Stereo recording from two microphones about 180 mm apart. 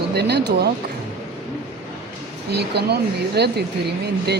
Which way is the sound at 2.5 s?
65° right (ahead or behind).